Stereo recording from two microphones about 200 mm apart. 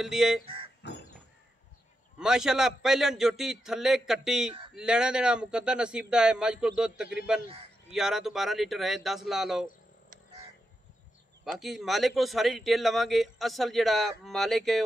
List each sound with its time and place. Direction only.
0.0 s a man's voice: centre (ahead or behind)
0.8 s a sound: 60° left (ahead or behind)
2.1 s a man's voice: 5° right (ahead or behind)
11.4 s a man's voice: centre (ahead or behind)